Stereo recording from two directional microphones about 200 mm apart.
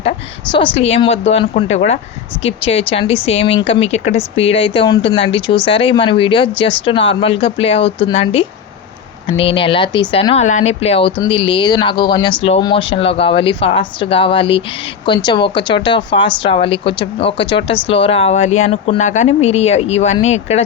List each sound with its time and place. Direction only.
0.8 s a woman's voice: 30° left (ahead or behind)